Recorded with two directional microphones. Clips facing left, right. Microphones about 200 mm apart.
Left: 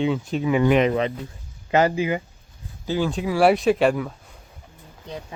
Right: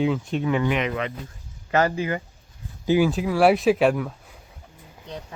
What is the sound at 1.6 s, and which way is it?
Speech, 20° left (ahead or behind).